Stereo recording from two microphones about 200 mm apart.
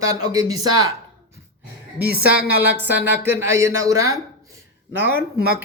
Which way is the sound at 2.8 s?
10° right (ahead or behind).